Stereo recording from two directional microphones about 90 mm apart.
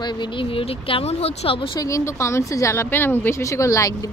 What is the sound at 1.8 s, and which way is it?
A woman's voice, 35° left (ahead or behind).